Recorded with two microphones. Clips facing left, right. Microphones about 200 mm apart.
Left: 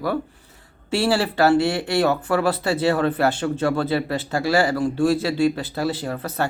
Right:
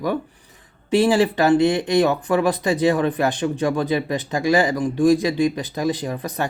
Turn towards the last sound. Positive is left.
turn(degrees=-15)  # may be behind; listen again after turning